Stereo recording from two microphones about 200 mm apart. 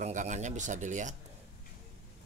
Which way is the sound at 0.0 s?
35° right (ahead or behind).